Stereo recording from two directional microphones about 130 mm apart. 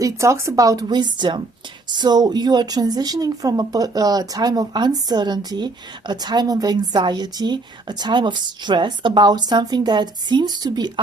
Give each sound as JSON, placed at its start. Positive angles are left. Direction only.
{"t": 0.0, "sound": "speech", "side_deg": -20}